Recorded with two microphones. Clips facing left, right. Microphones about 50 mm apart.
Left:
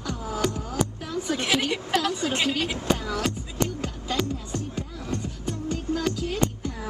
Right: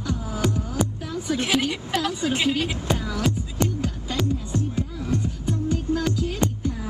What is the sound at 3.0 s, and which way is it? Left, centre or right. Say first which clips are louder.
Music: even; centre.